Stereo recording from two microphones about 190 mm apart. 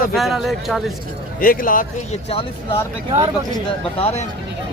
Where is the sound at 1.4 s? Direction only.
45° left (ahead or behind).